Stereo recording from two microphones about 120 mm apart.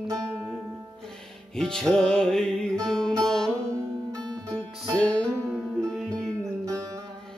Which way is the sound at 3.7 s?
25° right (ahead or behind).